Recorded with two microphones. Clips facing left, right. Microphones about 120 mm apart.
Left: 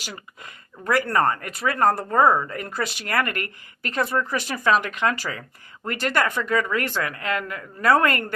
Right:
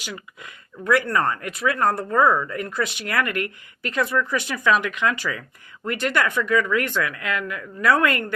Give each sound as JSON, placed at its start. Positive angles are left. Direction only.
{"t": 0.0, "sound": "a sound", "side_deg": 40}
{"t": 1.1, "sound": "speech", "side_deg": 35}
{"t": 2.1, "sound": "speech", "side_deg": 25}
{"t": 2.6, "sound": "speech", "side_deg": 35}